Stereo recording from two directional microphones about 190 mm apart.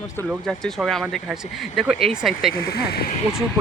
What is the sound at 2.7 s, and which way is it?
Speech, 55° left (ahead or behind).